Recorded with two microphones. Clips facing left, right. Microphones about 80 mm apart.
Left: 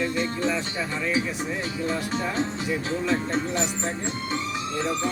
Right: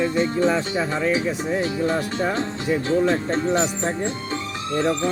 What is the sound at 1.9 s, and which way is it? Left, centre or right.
Speech, right.